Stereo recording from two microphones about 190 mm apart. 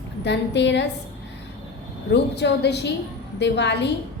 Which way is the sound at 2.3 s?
60° left (ahead or behind).